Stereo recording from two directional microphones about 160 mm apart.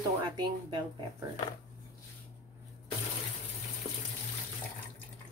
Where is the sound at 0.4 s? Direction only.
30° right (ahead or behind).